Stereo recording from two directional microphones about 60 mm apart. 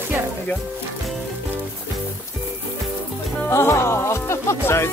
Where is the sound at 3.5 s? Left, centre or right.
Left.